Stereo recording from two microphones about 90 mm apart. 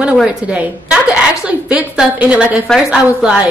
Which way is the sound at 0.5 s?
10° right (ahead or behind).